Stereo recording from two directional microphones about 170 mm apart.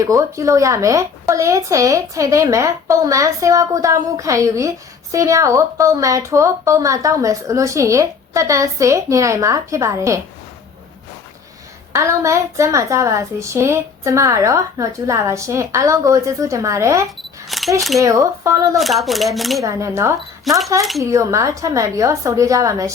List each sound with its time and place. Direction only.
0.0 s a woman's voice: 20° right (ahead or behind)
11.9 s a woman's voice: 15° right (ahead or behind)
17.7 s speech: centre (ahead or behind)
18.0 s a woman's voice: 20° right (ahead or behind)
18.8 s speech: centre (ahead or behind)
19.6 s a woman's voice: 15° right (ahead or behind)
20.5 s speech: centre (ahead or behind)
21.0 s a woman's voice: 20° right (ahead or behind)